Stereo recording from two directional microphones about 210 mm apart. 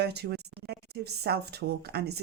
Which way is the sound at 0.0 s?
50° right (ahead or behind).